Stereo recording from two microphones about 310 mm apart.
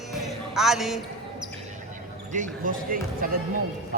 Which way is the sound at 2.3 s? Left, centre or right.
Right.